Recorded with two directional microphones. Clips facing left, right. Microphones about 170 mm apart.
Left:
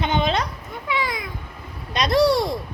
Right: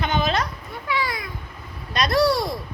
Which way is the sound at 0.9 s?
20° left (ahead or behind).